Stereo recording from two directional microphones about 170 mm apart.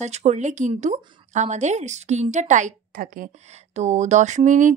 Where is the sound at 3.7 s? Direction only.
45° right (ahead or behind).